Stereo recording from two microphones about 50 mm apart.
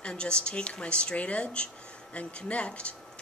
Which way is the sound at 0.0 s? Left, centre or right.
Centre.